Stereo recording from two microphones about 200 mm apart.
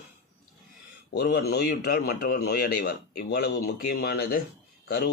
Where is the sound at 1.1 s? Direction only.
55° left (ahead or behind).